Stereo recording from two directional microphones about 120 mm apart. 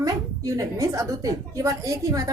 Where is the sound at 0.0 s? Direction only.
30° right (ahead or behind).